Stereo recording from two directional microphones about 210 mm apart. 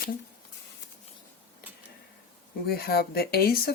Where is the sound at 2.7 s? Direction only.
45° left (ahead or behind).